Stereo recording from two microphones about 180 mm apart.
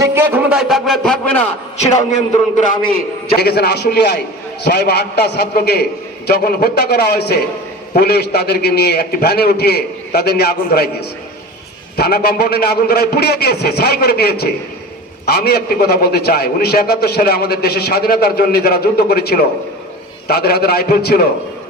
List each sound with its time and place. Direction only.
0.0 s a sound: 15° right (ahead or behind); by 1.4 s 5° left (ahead or behind)
2.9 s a man's voice: 60° left (ahead or behind)
11.9 s a man's voice: 60° left (ahead or behind)